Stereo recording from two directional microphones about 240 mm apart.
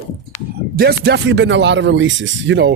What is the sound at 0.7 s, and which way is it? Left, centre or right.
Speech, right.